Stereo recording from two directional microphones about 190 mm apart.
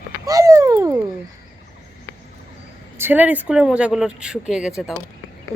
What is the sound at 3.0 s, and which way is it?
A woman's voice, 10° right (ahead or behind).